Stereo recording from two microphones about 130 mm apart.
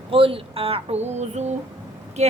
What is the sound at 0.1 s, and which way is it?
A woman's voice, 45° right (ahead or behind).